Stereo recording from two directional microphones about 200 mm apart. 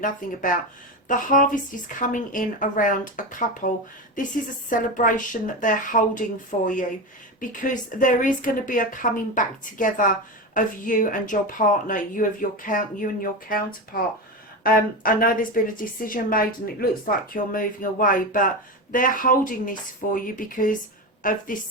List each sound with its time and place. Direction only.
0.0 s a woman's voice: 40° left (ahead or behind)